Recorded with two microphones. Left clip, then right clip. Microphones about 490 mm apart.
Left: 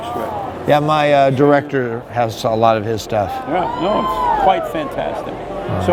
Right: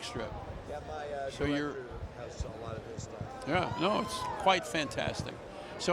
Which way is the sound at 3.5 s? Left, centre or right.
Right.